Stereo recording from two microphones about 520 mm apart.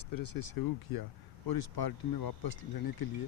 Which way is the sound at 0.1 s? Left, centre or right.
Left.